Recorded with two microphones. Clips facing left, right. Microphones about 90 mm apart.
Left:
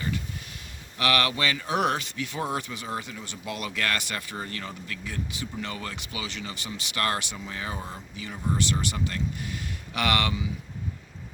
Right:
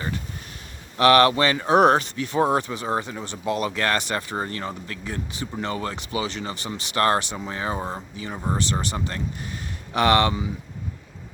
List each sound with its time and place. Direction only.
0.9 s speech: 35° right (ahead or behind)